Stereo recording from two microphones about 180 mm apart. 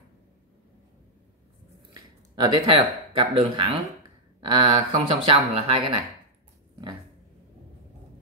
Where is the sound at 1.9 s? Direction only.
25° right (ahead or behind).